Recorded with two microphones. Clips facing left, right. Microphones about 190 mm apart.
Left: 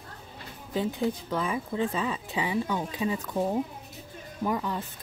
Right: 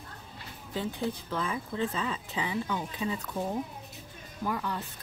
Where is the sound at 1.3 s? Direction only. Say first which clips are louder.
Left 4 dB; 15° left (ahead or behind).